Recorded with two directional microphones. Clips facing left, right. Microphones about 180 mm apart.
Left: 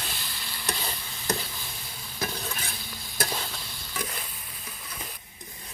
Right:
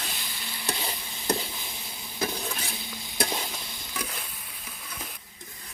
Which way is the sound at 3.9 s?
Centre (ahead or behind).